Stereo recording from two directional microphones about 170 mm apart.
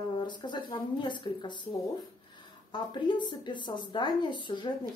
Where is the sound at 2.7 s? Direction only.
25° left (ahead or behind).